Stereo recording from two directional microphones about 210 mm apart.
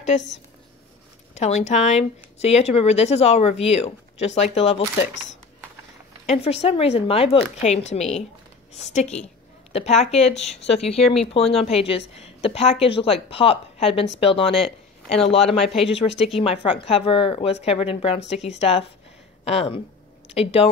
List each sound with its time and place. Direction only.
0.0 s speech: 35° left (ahead or behind)
1.3 s speech: 35° left (ahead or behind)
6.2 s speech: 30° left (ahead or behind)